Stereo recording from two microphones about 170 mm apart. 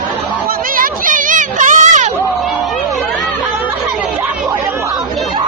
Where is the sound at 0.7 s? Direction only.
55° right (ahead or behind).